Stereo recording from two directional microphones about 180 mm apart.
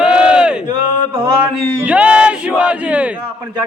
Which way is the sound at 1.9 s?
5° right (ahead or behind).